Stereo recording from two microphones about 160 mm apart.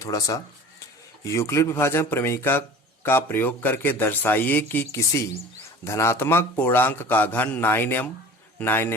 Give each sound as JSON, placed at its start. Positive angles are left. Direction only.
{"t": 0.0, "sound": "a man's voice", "side_deg": 20}